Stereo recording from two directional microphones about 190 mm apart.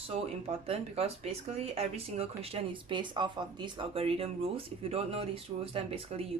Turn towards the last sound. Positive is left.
turn(degrees=-30)  # may be behind; listen again after turning